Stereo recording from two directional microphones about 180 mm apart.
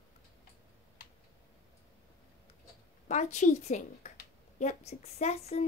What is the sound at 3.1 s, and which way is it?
A woman's voice, 40° left (ahead or behind).